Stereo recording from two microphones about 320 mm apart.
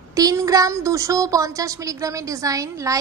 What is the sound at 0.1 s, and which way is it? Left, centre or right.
A woman's voice, centre.